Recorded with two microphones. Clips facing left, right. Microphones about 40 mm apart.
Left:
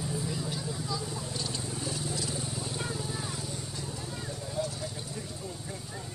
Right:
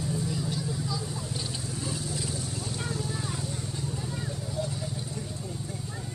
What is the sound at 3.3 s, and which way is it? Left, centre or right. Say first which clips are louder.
Vehicle: right 3 dB; centre.